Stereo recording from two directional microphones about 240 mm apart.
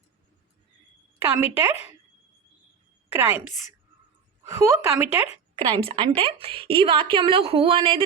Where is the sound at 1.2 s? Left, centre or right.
Centre.